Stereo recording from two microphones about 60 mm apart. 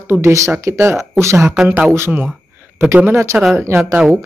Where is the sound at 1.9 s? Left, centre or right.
Right.